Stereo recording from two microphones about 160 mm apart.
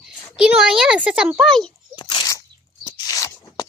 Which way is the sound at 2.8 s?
25° left (ahead or behind).